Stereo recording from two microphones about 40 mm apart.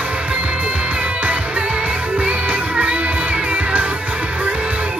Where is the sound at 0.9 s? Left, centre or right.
Right.